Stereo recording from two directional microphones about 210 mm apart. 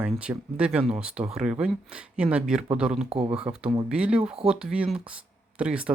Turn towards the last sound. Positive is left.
turn(degrees=-5)  # may be behind; listen again after turning